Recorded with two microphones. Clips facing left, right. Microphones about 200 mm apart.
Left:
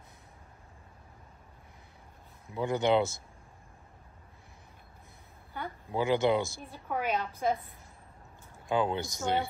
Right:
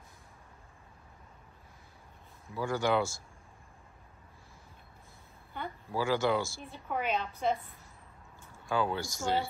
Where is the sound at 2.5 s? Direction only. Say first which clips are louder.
Left 3 dB; 20° left (ahead or behind).